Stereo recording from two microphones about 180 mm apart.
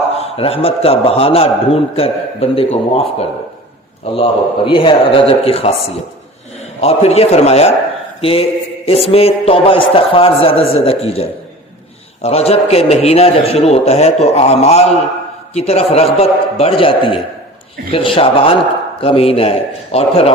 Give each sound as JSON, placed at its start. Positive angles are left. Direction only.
{"t": 0.2, "sound": "a man's voice", "side_deg": 30}